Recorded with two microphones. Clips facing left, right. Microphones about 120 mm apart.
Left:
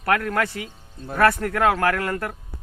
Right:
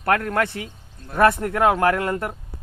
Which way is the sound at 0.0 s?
30° right (ahead or behind).